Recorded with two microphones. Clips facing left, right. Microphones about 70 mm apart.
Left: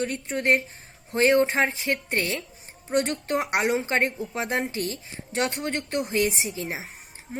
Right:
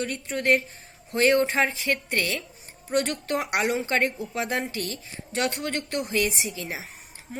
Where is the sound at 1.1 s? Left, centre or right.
Left.